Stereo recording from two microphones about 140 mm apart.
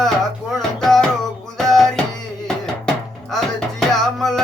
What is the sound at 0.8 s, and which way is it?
Music, 5° left (ahead or behind).